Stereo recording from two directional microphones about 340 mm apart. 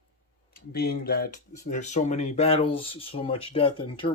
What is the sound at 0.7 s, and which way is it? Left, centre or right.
Speech, left.